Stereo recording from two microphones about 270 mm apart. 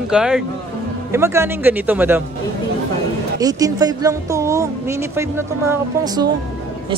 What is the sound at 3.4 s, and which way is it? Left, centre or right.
Speech, centre.